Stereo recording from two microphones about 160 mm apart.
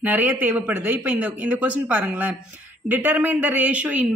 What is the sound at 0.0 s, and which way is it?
A woman's voice, 10° right (ahead or behind).